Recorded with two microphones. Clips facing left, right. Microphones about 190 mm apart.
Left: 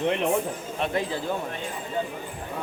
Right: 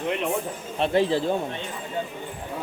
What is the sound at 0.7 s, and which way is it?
Speech, 30° right (ahead or behind).